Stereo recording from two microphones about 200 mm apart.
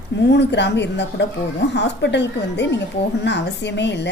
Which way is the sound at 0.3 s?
60° left (ahead or behind).